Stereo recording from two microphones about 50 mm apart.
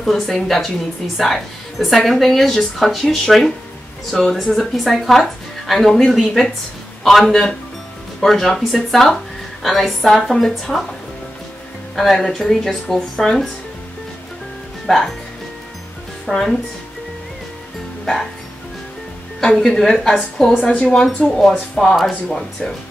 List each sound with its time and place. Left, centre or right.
0.0 s speech: centre
11.9 s speech: centre
14.9 s speech: centre
16.3 s speech: centre
18.0 s speech: centre
19.6 s speech: centre